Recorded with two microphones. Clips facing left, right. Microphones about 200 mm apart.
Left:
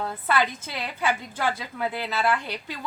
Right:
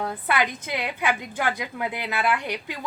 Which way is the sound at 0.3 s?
15° right (ahead or behind).